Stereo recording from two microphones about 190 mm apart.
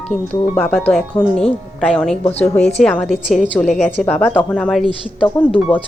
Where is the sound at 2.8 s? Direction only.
5° left (ahead or behind).